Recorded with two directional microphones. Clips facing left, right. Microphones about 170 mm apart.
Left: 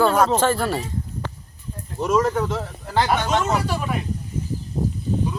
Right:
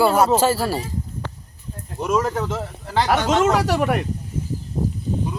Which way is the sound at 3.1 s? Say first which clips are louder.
Right 7 dB; 90° right.